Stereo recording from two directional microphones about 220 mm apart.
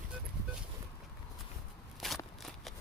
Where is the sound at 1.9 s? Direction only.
Centre (ahead or behind).